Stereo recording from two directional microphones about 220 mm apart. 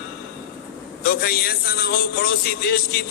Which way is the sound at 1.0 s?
45° left (ahead or behind).